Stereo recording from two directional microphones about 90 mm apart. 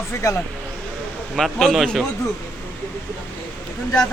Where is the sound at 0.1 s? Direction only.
30° left (ahead or behind).